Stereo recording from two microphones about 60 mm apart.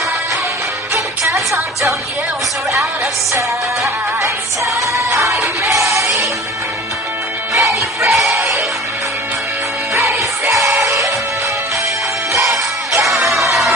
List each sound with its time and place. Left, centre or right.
0.9 s music: right
3.3 s music: right
7.5 s music: right
9.9 s music: right
12.4 s music: right
13.0 s music: centre